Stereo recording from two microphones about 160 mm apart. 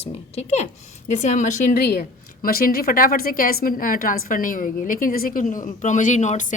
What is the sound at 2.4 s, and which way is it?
A woman's voice, 65° left (ahead or behind).